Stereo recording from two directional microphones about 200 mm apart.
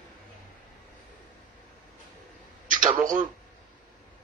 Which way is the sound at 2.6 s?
40° right (ahead or behind).